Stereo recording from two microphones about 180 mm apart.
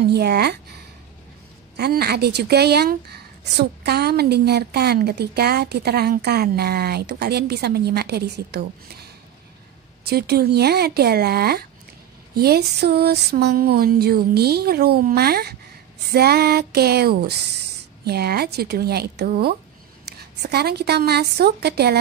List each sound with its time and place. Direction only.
0.1 s speech: 65° right (ahead or behind)
1.8 s a woman's voice: 60° right (ahead or behind)